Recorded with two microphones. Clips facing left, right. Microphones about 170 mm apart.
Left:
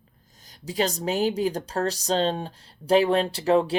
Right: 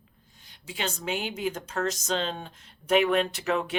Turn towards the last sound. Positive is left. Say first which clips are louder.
# left 7 dB
turn(degrees=30)  # may be behind; listen again after turning